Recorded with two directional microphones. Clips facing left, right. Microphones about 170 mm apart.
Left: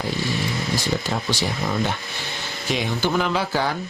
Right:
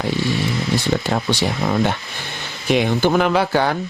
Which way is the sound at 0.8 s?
60° right (ahead or behind).